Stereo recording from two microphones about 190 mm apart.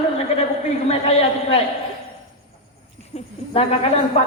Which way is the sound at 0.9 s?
30° left (ahead or behind).